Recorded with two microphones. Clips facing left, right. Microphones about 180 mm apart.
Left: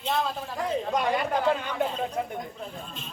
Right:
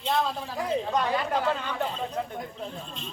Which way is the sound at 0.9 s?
10° left (ahead or behind).